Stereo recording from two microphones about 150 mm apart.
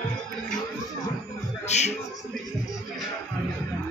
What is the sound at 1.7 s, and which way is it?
Music, 50° left (ahead or behind).